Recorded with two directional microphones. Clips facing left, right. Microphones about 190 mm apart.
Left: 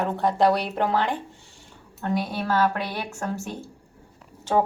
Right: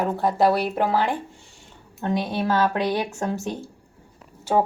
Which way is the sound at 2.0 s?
20° right (ahead or behind).